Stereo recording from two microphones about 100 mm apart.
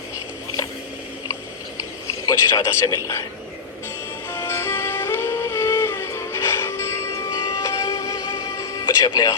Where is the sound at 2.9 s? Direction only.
30° left (ahead or behind).